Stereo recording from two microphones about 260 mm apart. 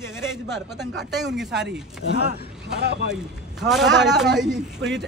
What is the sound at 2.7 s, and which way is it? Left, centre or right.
Speech, right.